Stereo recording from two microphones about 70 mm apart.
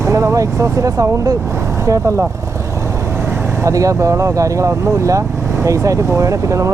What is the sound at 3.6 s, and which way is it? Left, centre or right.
Speech, right.